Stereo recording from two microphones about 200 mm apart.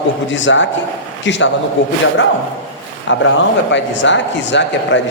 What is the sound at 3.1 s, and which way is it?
Speech, 65° left (ahead or behind).